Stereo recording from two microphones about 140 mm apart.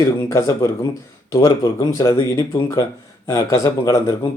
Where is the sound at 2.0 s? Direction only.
25° left (ahead or behind).